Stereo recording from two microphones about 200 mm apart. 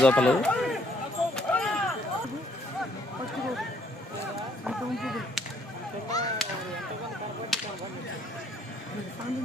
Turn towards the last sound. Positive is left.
turn(degrees=0)  # may be behind; listen again after turning